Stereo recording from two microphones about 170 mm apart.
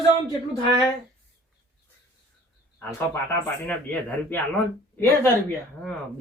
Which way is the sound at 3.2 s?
10° left (ahead or behind).